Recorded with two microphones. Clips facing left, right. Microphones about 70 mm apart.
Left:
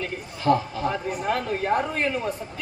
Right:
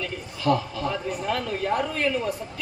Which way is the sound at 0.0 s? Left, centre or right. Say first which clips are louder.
Left 1 dB; left.